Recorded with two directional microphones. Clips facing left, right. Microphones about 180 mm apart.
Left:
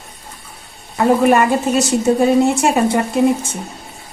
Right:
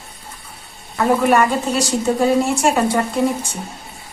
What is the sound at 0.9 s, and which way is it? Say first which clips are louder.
A woman's voice: left 2 dB; 20° left (ahead or behind).